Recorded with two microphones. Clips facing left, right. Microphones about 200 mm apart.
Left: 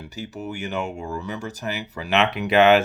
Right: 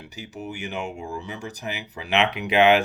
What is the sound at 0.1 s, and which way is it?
Speech, 15° right (ahead or behind).